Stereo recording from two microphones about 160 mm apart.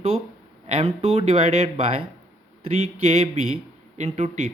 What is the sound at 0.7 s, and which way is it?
Speech, 40° right (ahead or behind).